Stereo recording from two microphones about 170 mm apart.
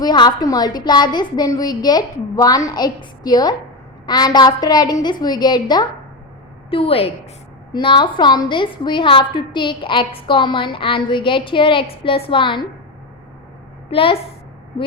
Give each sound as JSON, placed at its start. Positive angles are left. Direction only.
{"t": 0.0, "sound": "a woman's voice", "side_deg": 25}
{"t": 13.9, "sound": "a woman's voice", "side_deg": 35}